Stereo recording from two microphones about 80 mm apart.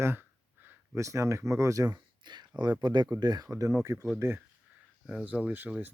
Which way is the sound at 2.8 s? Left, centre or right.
Right.